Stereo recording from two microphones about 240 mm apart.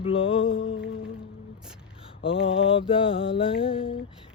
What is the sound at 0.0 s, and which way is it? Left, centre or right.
Mantra, left.